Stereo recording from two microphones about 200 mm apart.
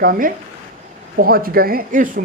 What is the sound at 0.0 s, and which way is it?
A man's voice, 45° right (ahead or behind).